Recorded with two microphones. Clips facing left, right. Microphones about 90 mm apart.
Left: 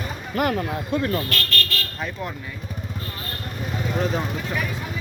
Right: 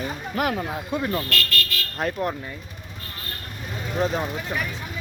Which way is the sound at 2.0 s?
55° right (ahead or behind).